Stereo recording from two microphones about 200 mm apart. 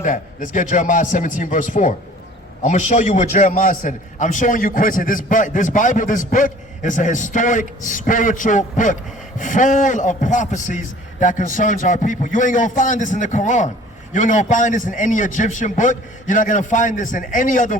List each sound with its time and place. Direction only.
0.0 s a man's voice: 40° left (ahead or behind)